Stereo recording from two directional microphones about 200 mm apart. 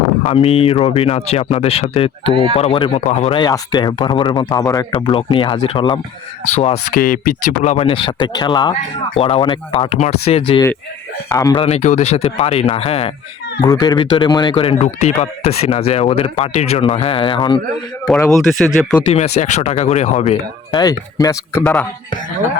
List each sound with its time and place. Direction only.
0.3 s speech: 30° left (ahead or behind)
6.5 s speech: 35° left (ahead or behind)
11.3 s a man's voice: 20° left (ahead or behind)
11.6 s speech: 35° left (ahead or behind)
18.3 s speech: centre (ahead or behind)
19.1 s speech: 30° left (ahead or behind)
20.7 s speech: 20° left (ahead or behind)
21.6 s speech: 5° left (ahead or behind)